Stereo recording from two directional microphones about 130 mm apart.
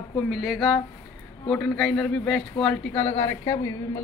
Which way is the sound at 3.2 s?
25° left (ahead or behind).